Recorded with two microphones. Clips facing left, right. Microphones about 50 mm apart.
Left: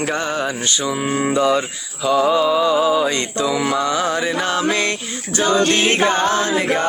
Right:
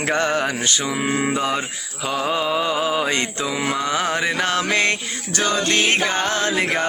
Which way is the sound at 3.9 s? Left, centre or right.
Right.